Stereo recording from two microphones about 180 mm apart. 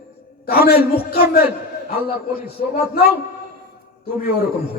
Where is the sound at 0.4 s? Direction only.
55° left (ahead or behind).